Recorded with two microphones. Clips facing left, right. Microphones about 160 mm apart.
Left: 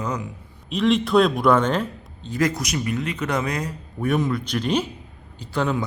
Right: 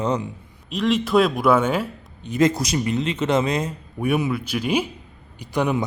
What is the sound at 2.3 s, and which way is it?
A man's voice, 25° right (ahead or behind).